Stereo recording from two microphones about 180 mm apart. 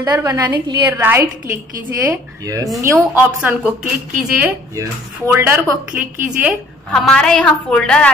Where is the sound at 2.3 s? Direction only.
20° right (ahead or behind).